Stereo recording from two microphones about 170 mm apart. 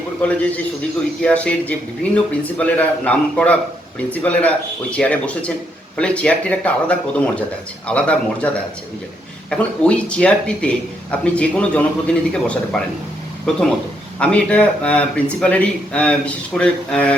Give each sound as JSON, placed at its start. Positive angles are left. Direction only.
{"t": 0.2, "sound": "a man's voice", "side_deg": 10}